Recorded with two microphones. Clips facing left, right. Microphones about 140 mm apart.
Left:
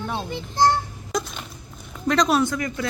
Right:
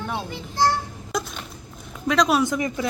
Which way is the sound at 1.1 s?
Centre (ahead or behind).